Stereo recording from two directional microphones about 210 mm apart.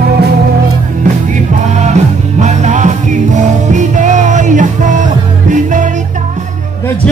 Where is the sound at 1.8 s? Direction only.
35° right (ahead or behind).